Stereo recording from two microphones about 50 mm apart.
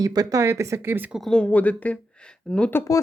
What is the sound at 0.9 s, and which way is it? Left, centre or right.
Speech, right.